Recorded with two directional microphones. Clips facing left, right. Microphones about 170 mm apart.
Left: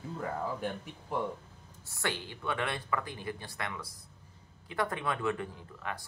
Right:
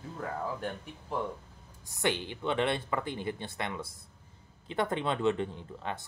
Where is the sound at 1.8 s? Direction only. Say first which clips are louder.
Right 5 dB; 20° right (ahead or behind).